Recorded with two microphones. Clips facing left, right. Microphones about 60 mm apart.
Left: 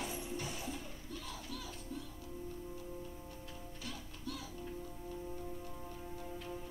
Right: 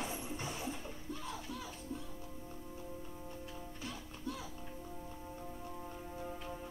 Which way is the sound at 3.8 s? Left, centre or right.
Right.